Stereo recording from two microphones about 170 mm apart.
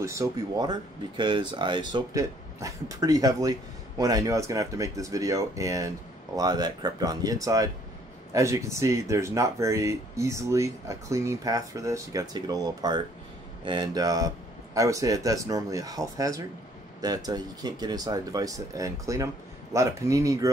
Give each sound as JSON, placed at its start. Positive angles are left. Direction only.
{"t": 0.0, "sound": "speech", "side_deg": -20}